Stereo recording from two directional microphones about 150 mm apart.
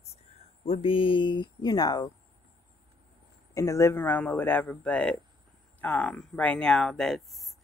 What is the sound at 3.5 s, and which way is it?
Speech, 20° left (ahead or behind).